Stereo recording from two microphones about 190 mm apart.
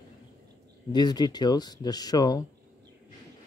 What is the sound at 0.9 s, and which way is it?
Speech, 20° left (ahead or behind).